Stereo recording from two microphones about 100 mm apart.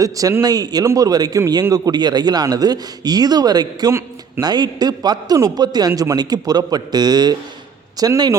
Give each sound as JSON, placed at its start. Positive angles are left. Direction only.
{"t": 0.0, "sound": "a man's voice", "side_deg": -35}
{"t": 5.9, "sound": "speech", "side_deg": -30}
{"t": 6.1, "sound": "a man's voice", "side_deg": -40}